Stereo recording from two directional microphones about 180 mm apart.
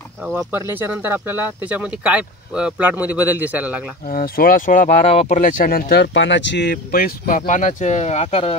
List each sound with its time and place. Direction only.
0.2 s speech: 10° right (ahead or behind)
4.1 s speech: 55° left (ahead or behind); by 8.5 s 35° left (ahead or behind)